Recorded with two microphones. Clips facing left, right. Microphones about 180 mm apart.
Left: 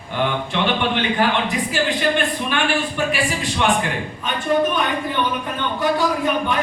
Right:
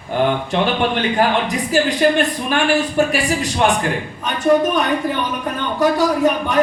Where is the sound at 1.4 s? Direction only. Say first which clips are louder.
Right 4 dB; 40° right (ahead or behind).